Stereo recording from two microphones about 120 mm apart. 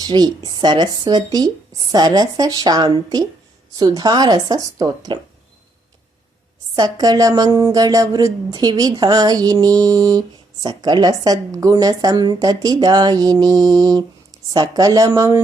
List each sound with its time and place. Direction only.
0.0 s a woman's voice: 35° right (ahead or behind)
6.7 s a woman's voice: 35° right (ahead or behind)